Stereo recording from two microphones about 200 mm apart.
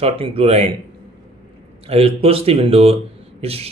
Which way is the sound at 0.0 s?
30° right (ahead or behind).